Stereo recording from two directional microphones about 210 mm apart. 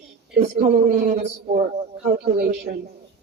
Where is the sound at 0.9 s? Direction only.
35° right (ahead or behind).